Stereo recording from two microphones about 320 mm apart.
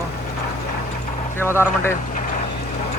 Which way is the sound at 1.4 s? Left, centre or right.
Centre.